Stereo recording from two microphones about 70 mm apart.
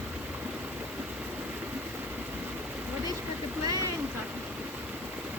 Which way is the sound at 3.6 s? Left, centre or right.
Right.